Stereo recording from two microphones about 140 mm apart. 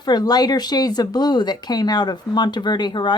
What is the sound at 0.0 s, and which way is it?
Speech, 30° left (ahead or behind).